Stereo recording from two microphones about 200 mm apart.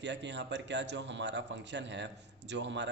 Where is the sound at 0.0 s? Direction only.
60° right (ahead or behind).